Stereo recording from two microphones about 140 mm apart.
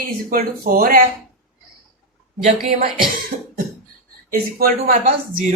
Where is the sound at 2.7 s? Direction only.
85° right.